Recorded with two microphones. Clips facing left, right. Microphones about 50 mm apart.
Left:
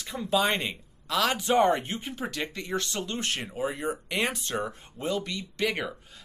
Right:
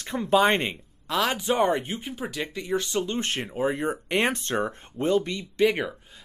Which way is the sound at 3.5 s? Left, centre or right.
Right.